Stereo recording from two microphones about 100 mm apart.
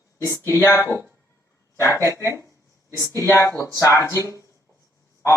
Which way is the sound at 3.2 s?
30° left (ahead or behind).